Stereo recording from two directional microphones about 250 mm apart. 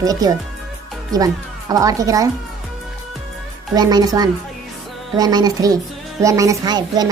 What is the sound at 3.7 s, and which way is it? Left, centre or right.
Speech, centre.